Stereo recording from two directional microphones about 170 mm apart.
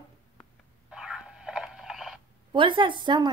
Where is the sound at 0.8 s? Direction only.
5° right (ahead or behind).